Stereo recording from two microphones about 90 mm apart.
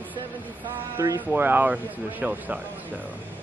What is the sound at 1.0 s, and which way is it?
Speech, 35° right (ahead or behind).